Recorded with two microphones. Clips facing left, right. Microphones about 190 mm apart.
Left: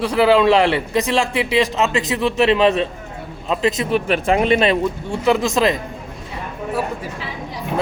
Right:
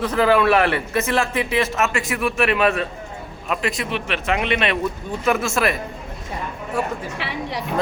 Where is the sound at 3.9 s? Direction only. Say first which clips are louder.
Left 6 dB; 40° left (ahead or behind).